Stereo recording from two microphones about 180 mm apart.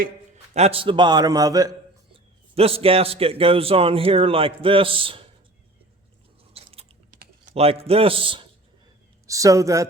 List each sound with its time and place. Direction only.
0.5 s a man's voice: 35° right (ahead or behind)
2.1 s a man's voice: 35° right (ahead or behind)
6.5 s biting: 35° right (ahead or behind)
7.1 s typing: 45° right (ahead or behind)
7.5 s a man's voice: 35° right (ahead or behind)
9.2 s speech: 20° right (ahead or behind)